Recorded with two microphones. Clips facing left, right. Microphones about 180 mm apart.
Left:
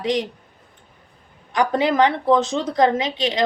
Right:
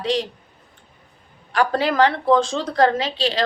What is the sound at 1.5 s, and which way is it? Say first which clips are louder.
Speech: left 1 dB; 20° left (ahead or behind).